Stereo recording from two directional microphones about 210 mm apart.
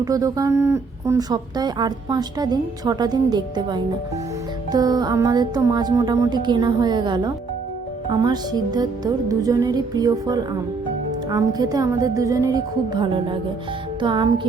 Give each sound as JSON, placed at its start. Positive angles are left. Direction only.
{"t": 0.0, "sound": "speech", "side_deg": -15}